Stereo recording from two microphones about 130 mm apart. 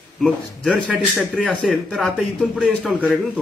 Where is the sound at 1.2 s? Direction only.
5° right (ahead or behind).